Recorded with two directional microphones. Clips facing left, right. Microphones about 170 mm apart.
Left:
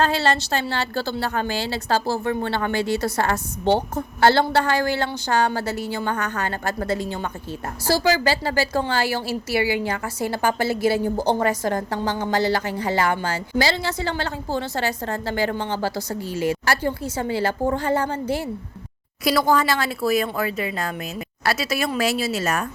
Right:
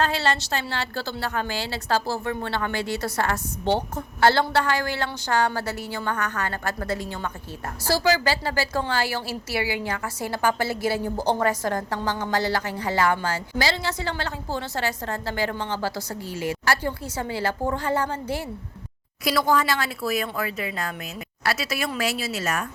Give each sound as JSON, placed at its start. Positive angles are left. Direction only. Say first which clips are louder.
{"t": 0.0, "sound": "a woman's voice", "louder": "left 3 dB", "side_deg": 35}